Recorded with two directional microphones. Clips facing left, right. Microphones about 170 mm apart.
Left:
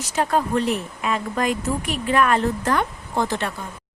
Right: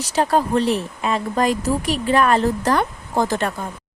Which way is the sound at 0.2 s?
30° right (ahead or behind).